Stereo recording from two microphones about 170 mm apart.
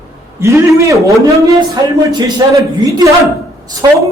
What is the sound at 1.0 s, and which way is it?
A woman's voice, 20° right (ahead or behind).